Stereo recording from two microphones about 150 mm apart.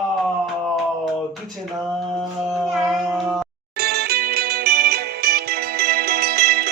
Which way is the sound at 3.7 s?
90° right.